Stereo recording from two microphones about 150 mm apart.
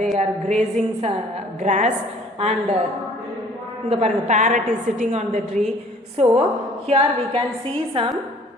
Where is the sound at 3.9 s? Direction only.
50° right (ahead or behind).